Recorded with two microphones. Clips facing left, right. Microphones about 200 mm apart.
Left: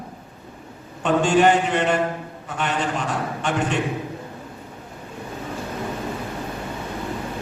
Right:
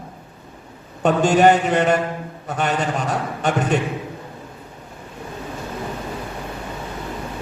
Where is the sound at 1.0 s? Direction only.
40° right (ahead or behind).